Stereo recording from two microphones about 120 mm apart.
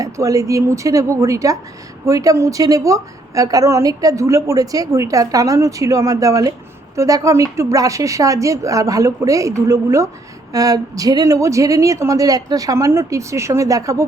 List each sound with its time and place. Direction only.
0.0 s a woman's voice: 30° right (ahead or behind)